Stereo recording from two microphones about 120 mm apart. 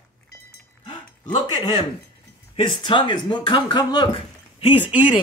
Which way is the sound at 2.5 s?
45° left (ahead or behind).